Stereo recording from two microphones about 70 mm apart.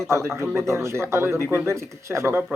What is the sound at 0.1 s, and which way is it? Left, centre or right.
Speech, right.